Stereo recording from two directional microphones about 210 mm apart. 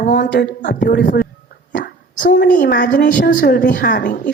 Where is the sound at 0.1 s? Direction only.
50° left (ahead or behind).